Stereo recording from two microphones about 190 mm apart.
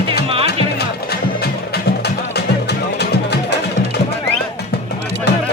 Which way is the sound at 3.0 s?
60° left (ahead or behind).